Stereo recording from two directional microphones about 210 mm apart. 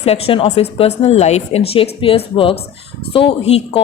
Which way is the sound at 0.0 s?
30° left (ahead or behind).